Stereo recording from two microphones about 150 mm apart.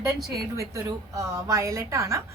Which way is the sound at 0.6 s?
20° right (ahead or behind).